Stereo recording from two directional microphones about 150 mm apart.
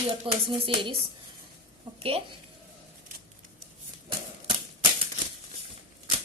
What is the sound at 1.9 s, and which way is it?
Speech, 40° right (ahead or behind).